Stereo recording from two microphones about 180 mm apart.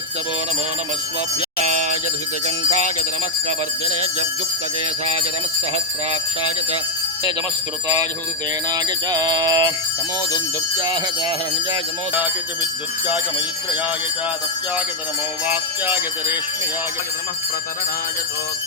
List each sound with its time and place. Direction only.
1.4 s a sound: 40° right (ahead or behind)
8.7 s music: 20° right (ahead or behind)
10.8 s music: 25° right (ahead or behind)
15.4 s jingle bell: 10° right (ahead or behind)